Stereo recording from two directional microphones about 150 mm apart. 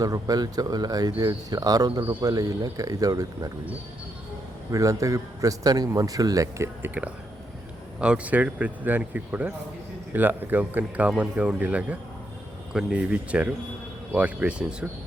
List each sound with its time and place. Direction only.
0.0 s a man's voice: 25° right (ahead or behind)
4.7 s a man's voice: 20° right (ahead or behind)